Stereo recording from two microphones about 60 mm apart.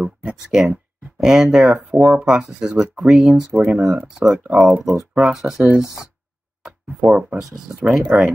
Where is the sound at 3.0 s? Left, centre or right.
Centre.